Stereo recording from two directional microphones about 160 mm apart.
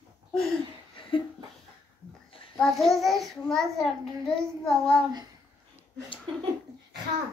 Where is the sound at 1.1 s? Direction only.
30° left (ahead or behind).